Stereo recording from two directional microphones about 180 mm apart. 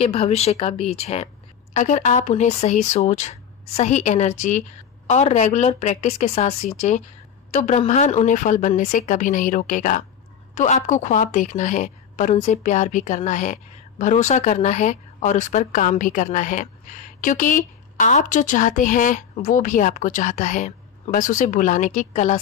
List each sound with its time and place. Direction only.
0.0 s a woman's voice: 35° left (ahead or behind)